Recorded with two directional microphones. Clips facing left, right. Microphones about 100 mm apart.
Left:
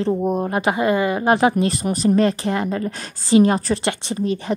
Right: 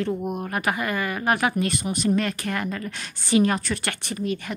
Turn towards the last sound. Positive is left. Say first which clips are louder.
# left 5 dB
turn(degrees=30)  # may be behind; listen again after turning